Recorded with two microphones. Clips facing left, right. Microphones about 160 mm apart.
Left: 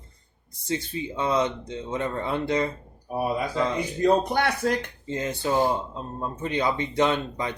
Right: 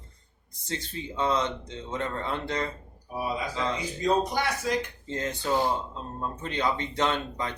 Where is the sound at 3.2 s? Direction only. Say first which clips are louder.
Left 5 dB; 55° left (ahead or behind).